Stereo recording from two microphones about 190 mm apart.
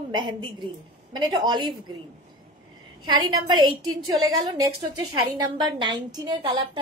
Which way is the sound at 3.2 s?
20° right (ahead or behind).